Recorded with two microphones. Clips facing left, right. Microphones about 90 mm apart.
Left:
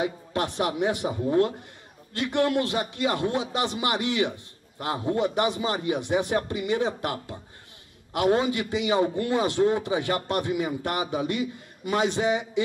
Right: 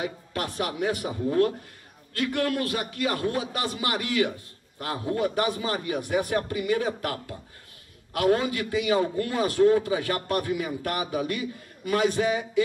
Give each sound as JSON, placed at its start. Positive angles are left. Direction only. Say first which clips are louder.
{"t": 0.0, "sound": "a man's voice", "louder": "left 4 dB", "side_deg": 25}